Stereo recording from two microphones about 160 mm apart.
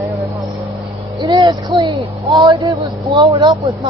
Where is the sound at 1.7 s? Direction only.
35° right (ahead or behind).